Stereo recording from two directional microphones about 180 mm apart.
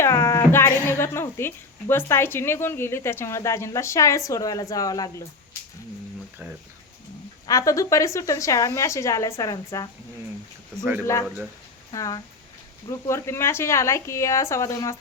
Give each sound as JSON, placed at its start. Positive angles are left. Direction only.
{"t": 0.0, "sound": "music", "side_deg": 15}
{"t": 0.9, "sound": "speech", "side_deg": 15}
{"t": 7.4, "sound": "speech", "side_deg": 20}
{"t": 11.0, "sound": "speech", "side_deg": 15}